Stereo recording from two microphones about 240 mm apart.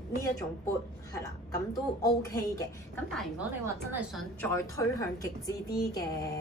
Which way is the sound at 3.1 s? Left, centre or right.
Centre.